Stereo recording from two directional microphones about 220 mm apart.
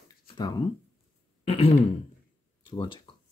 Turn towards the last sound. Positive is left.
turn(degrees=20)  # may be behind; listen again after turning